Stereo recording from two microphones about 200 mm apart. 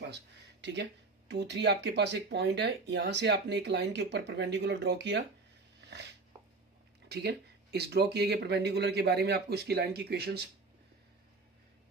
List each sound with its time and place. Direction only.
0.0 s a sound: 60° right (ahead or behind)
1.3 s speech: 60° right (ahead or behind)
7.1 s speech: 55° right (ahead or behind)